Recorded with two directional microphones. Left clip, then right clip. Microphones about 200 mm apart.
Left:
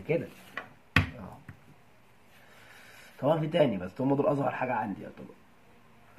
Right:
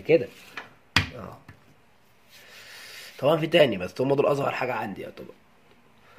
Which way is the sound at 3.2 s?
50° right (ahead or behind).